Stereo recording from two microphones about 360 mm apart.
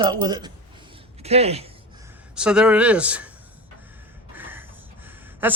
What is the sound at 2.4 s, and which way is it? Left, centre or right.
Speech, centre.